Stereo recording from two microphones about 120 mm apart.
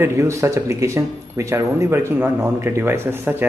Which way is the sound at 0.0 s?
20° right (ahead or behind).